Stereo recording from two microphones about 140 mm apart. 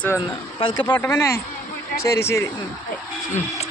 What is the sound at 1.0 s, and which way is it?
Speech, 20° left (ahead or behind).